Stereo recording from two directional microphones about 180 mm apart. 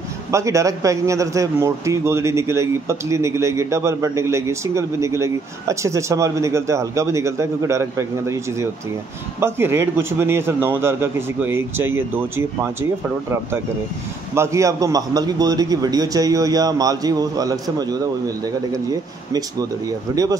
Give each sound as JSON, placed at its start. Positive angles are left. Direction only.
{"t": 0.3, "sound": "a man's voice", "side_deg": -15}
{"t": 14.3, "sound": "a man's voice", "side_deg": -15}
{"t": 20.1, "sound": "a man's voice", "side_deg": -20}